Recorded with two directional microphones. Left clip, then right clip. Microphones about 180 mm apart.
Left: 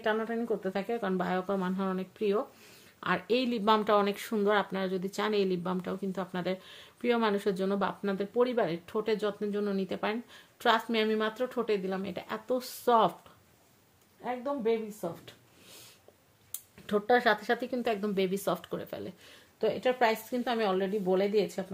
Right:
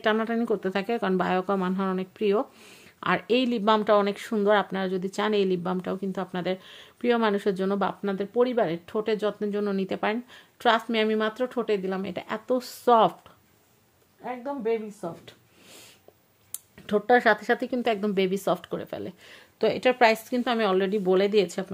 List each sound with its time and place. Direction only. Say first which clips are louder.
0.0 s speech: right 6 dB; 60° right (ahead or behind); by 13.1 s 35° right (ahead or behind)
14.2 s speech: right 1 dB; 20° right (ahead or behind)
15.2 s a sound: right 3 dB; 35° right (ahead or behind)
16.8 s speech: right 5 dB; 35° right (ahead or behind)
19.6 s a woman's voice: right 6 dB; 60° right (ahead or behind)